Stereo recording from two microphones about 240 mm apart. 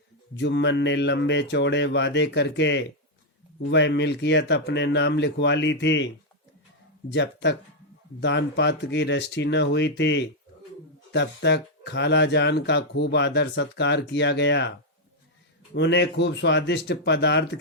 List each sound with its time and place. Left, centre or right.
0.3 s speech: left
7.1 s speech: left
15.7 s speech: left